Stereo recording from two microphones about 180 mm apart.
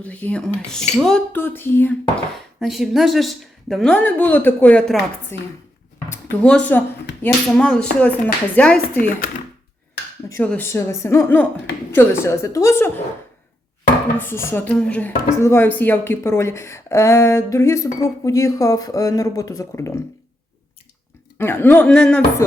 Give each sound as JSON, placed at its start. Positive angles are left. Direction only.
{"t": 0.0, "sound": "speech", "side_deg": 10}
{"t": 2.6, "sound": "a woman's voice", "side_deg": 0}
{"t": 10.2, "sound": "speech", "side_deg": 10}
{"t": 14.2, "sound": "speech", "side_deg": 15}
{"t": 21.3, "sound": "speech", "side_deg": 10}